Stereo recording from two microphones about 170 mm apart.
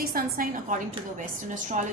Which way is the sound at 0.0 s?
60° right (ahead or behind).